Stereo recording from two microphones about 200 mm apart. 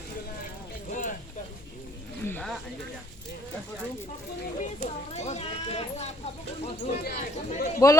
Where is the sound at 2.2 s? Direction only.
10° left (ahead or behind).